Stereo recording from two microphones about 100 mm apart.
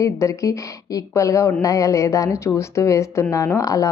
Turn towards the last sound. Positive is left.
turn(degrees=35)  # may be behind; listen again after turning